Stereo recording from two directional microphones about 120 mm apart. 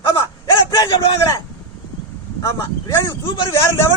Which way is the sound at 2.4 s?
25° left (ahead or behind).